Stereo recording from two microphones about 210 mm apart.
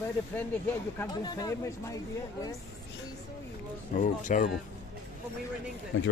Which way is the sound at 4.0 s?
35° left (ahead or behind).